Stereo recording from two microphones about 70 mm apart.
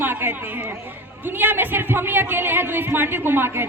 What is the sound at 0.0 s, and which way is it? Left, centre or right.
Chatter, right.